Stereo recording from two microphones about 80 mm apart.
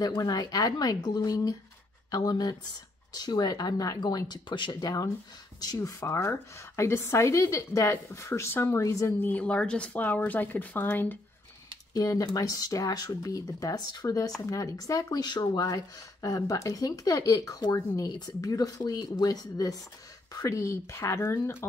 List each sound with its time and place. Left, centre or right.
0.2 s speech: left
4.7 s speech: left
5.8 s a woman's voice: left
8.8 s a woman's voice: left
9.2 s speech: centre
11.9 s speech: left
15.2 s a woman's voice: left